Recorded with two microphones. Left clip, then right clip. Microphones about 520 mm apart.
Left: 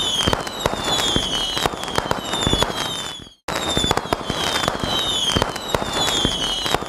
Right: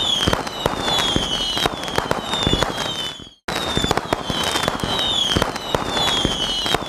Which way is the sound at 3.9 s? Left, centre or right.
Centre.